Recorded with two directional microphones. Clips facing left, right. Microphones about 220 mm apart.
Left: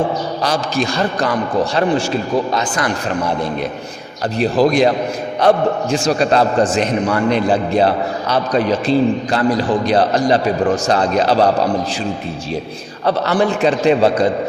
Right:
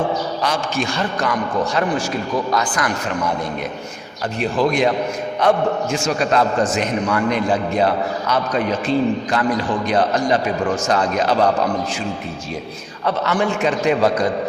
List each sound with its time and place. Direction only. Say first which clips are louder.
0.4 s a man's voice: left 5 dB; 35° left (ahead or behind)
4.4 s a man's voice: left 5 dB; 35° left (ahead or behind)
13.1 s a man's voice: left 4 dB; 35° left (ahead or behind)